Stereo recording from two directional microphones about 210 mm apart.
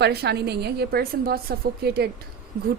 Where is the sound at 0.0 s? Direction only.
50° right (ahead or behind).